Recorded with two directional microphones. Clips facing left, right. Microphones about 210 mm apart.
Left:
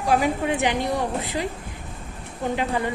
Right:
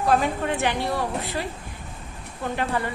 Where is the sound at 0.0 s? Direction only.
10° left (ahead or behind).